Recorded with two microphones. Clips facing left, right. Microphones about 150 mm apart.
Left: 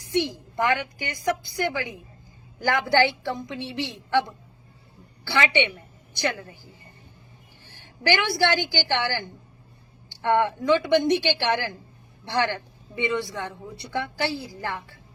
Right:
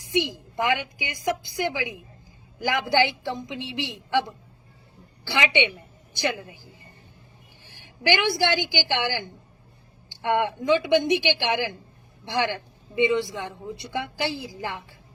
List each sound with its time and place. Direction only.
0.0 s a woman's voice: 15° right (ahead or behind)
7.7 s a woman's voice: 15° right (ahead or behind)